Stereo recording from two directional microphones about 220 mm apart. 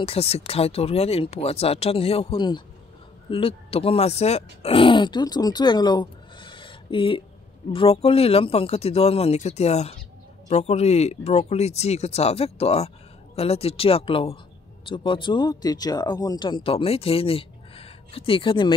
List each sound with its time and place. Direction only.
0.0 s speech: 25° left (ahead or behind)